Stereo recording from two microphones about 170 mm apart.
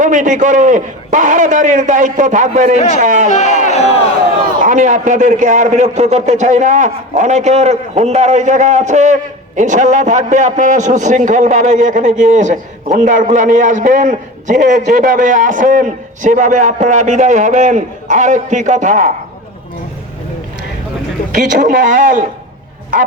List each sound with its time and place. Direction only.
0.0 s a man's voice: 50° right (ahead or behind)
3.2 s speech: 45° left (ahead or behind)
4.6 s a man's voice: 50° right (ahead or behind)
21.3 s a man's voice: 50° right (ahead or behind)